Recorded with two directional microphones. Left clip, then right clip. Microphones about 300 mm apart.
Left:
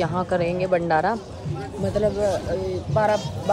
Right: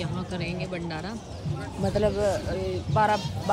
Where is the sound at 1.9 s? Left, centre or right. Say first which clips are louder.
Left 3 dB; centre.